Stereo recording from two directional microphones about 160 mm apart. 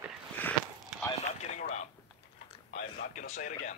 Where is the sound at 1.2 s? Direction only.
45° left (ahead or behind).